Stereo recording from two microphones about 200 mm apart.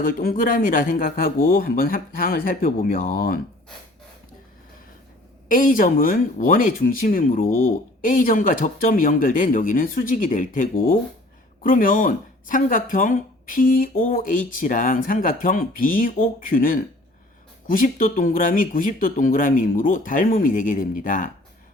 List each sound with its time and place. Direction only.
0.0 s speech: 45° left (ahead or behind)
5.5 s speech: 40° left (ahead or behind)